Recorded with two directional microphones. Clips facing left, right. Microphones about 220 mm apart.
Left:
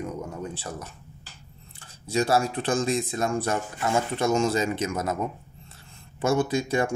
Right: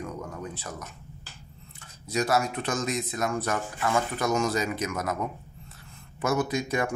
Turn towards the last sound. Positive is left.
turn(degrees=30)  # may be behind; listen again after turning